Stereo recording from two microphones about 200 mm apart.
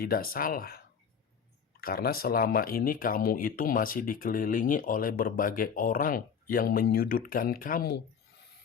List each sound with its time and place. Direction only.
0.0 s speech: 45° left (ahead or behind)
1.8 s speech: 50° left (ahead or behind)